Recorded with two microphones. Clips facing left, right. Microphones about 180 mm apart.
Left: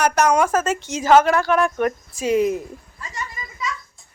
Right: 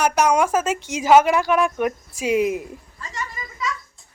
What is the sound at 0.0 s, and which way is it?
Speech, 10° right (ahead or behind).